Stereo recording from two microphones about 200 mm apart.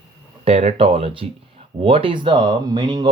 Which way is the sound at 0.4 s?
30° right (ahead or behind).